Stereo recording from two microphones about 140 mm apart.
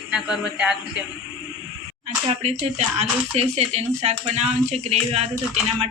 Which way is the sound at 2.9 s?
50° right (ahead or behind).